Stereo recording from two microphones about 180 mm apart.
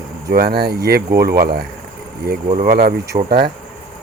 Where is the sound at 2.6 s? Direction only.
60° right (ahead or behind).